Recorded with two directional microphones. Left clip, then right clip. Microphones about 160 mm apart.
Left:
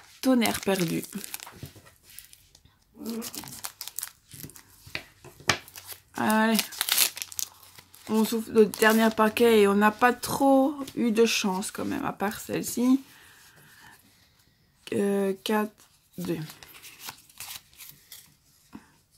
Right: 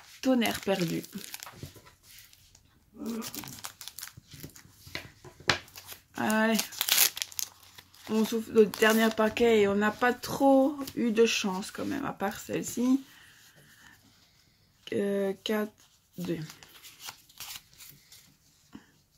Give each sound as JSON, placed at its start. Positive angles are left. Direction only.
{"t": 0.2, "sound": "speech", "side_deg": 25}
{"t": 3.0, "sound": "crumpling", "side_deg": 15}
{"t": 5.4, "sound": "a sound", "side_deg": 20}
{"t": 6.5, "sound": "crumpling", "side_deg": 5}
{"t": 7.3, "sound": "crumpling", "side_deg": 15}
{"t": 9.2, "sound": "speech", "side_deg": 30}
{"t": 14.9, "sound": "speech", "side_deg": 25}
{"t": 16.5, "sound": "shuffling cards", "side_deg": 10}
{"t": 18.7, "sound": "a sound", "side_deg": 20}